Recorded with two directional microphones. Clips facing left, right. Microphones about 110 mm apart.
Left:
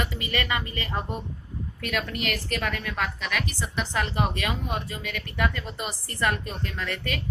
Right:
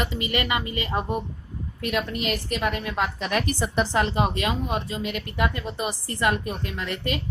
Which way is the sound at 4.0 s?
20° right (ahead or behind).